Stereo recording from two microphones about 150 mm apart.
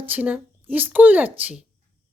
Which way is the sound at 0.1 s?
10° right (ahead or behind).